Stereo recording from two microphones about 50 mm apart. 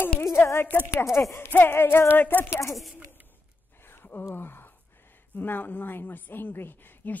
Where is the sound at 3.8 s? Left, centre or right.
Left.